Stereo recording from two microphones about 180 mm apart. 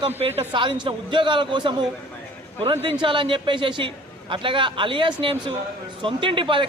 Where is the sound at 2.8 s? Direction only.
30° right (ahead or behind).